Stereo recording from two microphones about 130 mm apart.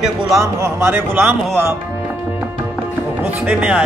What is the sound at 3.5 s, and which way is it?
Speech, 10° right (ahead or behind).